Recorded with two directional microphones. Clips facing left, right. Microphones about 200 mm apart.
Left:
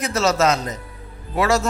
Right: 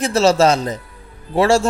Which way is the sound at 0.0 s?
30° right (ahead or behind).